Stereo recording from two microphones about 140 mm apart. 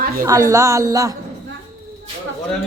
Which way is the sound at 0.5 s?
25° right (ahead or behind).